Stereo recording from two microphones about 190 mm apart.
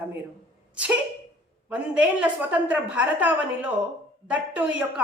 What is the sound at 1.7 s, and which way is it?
A woman's voice, 5° right (ahead or behind).